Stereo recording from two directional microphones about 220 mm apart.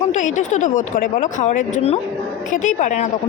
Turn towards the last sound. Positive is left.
turn(degrees=35)  # may be behind; listen again after turning